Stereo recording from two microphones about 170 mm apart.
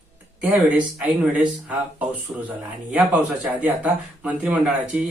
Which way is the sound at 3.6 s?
10° right (ahead or behind).